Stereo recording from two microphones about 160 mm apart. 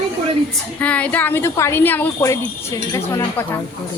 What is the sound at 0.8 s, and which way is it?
A woman's voice, 10° left (ahead or behind).